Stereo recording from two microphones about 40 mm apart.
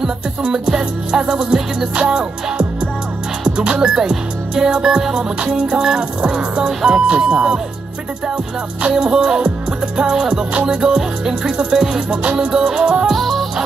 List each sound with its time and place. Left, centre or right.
0.4 s music: centre
3.8 s music: centre
8.8 s music: right
13.1 s music: centre